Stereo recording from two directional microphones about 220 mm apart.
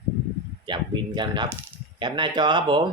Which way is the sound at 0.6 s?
20° right (ahead or behind).